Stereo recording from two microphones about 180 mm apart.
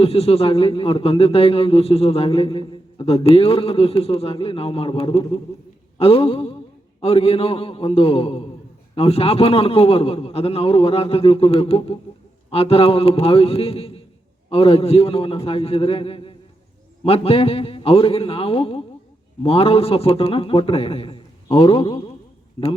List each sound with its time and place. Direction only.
0.0 s a man's voice: 35° left (ahead or behind)